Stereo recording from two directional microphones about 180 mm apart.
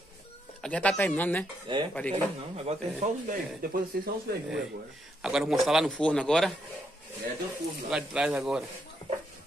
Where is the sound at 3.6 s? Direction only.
55° right (ahead or behind).